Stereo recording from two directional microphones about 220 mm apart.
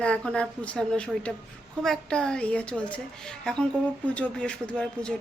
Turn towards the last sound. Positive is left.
turn(degrees=5)  # may be behind; listen again after turning